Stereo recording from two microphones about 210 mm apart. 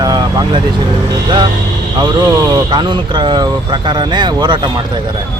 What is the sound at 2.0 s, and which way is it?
Speech, 20° right (ahead or behind).